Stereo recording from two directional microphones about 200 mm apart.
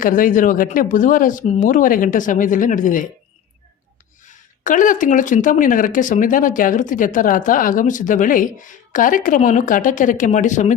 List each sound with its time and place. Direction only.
0.0 s speech: 40° left (ahead or behind)
4.6 s speech: 40° left (ahead or behind)